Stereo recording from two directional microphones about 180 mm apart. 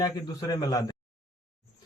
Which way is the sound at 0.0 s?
20° left (ahead or behind).